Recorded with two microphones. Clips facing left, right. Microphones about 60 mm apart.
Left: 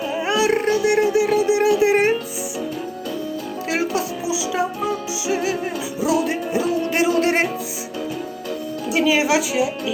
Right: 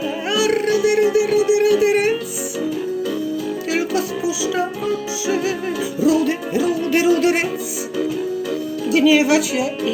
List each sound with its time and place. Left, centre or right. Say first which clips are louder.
0.3 s music: right 1 dB; left
3.7 s music: right 1 dB; left
8.9 s speech: right 4 dB; left